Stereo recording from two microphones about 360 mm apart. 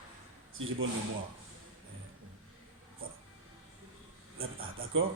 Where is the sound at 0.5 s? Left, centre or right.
Right.